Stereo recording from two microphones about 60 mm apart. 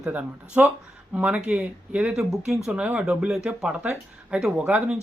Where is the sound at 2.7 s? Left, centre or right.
Right.